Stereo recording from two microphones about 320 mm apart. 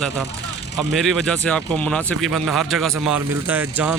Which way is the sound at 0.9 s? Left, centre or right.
Centre.